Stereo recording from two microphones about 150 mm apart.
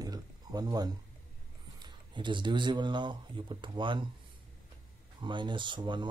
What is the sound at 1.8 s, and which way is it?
Speech, 30° right (ahead or behind).